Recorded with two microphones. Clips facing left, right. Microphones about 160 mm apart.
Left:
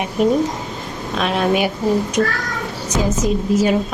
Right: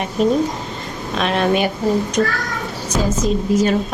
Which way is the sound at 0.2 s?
10° left (ahead or behind).